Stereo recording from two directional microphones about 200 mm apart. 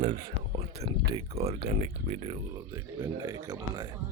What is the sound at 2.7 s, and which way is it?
Speech, 15° right (ahead or behind).